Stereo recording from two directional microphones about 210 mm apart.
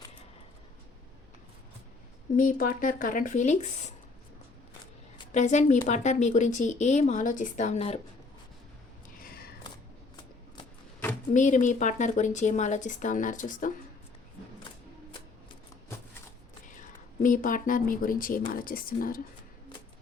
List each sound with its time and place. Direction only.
2.3 s speech: 40° left (ahead or behind)
5.3 s speech: 35° left (ahead or behind)
9.1 s a sound: 45° left (ahead or behind)
11.3 s speech: 35° left (ahead or behind)
16.6 s a woman's voice: 40° left (ahead or behind)